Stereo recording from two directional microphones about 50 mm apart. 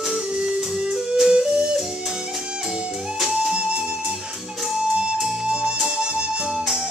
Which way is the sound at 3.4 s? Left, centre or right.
Centre.